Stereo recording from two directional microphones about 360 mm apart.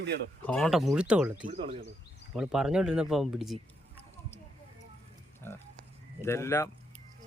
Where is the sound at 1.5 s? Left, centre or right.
Centre.